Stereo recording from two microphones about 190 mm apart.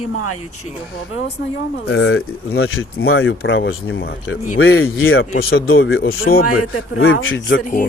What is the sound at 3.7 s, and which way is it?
Speech, 60° left (ahead or behind).